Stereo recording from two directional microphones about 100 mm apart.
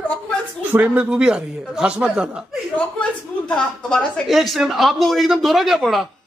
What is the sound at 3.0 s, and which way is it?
A man's voice, 10° left (ahead or behind).